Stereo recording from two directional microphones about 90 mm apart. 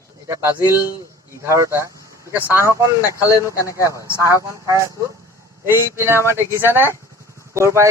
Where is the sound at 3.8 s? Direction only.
35° right (ahead or behind).